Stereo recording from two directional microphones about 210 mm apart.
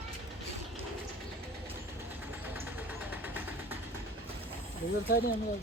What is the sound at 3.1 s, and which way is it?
Vehicle, 10° right (ahead or behind).